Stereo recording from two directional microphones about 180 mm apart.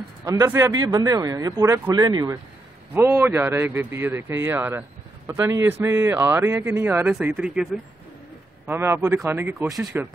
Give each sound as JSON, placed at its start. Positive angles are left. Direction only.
{"t": 0.2, "sound": "speech", "side_deg": -20}
{"t": 8.6, "sound": "speech", "side_deg": -15}